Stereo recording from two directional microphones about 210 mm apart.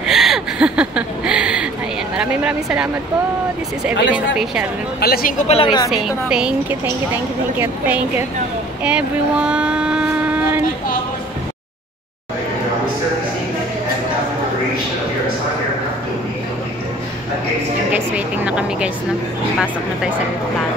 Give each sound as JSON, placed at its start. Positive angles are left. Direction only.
{"t": 0.0, "sound": "a sound", "side_deg": 0}
{"t": 4.1, "sound": "a woman's voice", "side_deg": -5}
{"t": 5.0, "sound": "speech", "side_deg": 45}
{"t": 5.5, "sound": "a woman's voice", "side_deg": 25}
{"t": 5.9, "sound": "a woman's voice", "side_deg": 0}
{"t": 8.8, "sound": "a sound", "side_deg": -5}
{"t": 17.9, "sound": "vehicle", "side_deg": -5}